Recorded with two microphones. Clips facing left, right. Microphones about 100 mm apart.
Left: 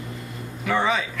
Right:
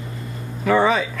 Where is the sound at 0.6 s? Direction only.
40° right (ahead or behind).